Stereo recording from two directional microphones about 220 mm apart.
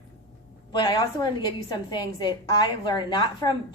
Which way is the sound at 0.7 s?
20° left (ahead or behind).